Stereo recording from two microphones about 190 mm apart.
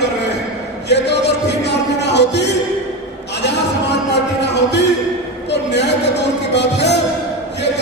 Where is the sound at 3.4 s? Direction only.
65° left (ahead or behind).